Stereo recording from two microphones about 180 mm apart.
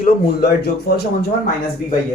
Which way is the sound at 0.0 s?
60° left (ahead or behind).